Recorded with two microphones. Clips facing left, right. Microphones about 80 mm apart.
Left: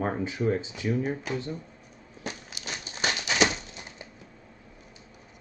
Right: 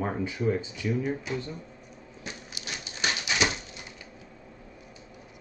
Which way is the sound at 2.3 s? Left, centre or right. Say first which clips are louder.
Left 3 dB; left.